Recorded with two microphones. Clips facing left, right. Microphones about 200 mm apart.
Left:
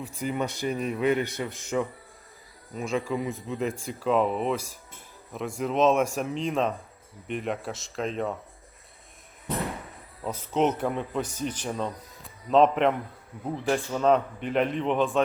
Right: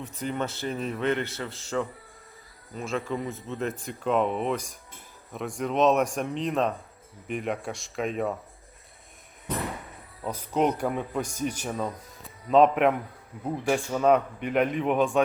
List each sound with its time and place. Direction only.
0.2 s a man's voice: 10° left (ahead or behind)
1.1 s a man's voice: 15° left (ahead or behind)
2.7 s speech: centre (ahead or behind)
10.2 s speech: centre (ahead or behind)